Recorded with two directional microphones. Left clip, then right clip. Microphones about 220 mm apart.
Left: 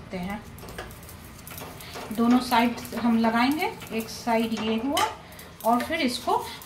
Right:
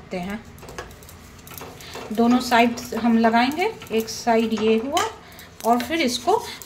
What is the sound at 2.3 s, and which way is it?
Speech, 50° right (ahead or behind).